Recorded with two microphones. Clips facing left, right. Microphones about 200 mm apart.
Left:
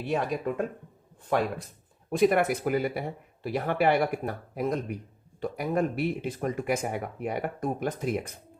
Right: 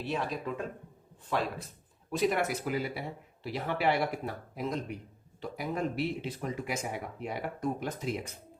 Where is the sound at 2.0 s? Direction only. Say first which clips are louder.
Left 6 dB; 55° left (ahead or behind).